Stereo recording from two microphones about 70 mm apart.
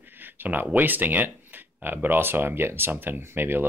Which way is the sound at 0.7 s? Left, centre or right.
Right.